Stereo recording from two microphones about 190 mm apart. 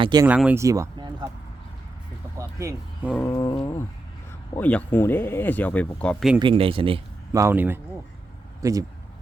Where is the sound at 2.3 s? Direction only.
15° right (ahead or behind).